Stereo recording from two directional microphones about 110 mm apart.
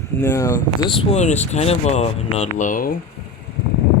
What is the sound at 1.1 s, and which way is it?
Speech, 90° left.